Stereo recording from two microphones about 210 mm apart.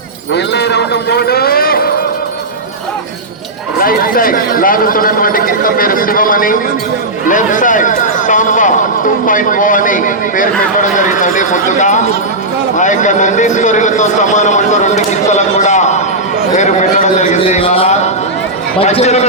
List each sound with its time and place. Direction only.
0.3 s speech: 55° left (ahead or behind)
3.8 s a man's voice: 40° left (ahead or behind)